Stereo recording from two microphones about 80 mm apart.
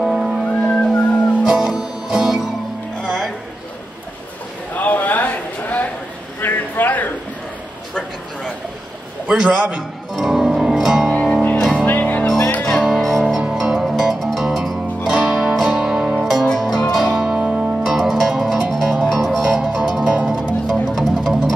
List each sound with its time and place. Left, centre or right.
0.0 s music: centre
4.7 s a sound: left
9.3 s music: centre
11.8 s music: centre
12.6 s music: centre